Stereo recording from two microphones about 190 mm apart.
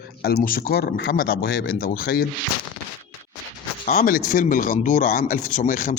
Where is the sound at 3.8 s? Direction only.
40° left (ahead or behind).